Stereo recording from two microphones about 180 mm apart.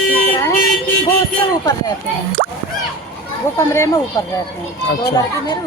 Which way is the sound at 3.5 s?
15° left (ahead or behind).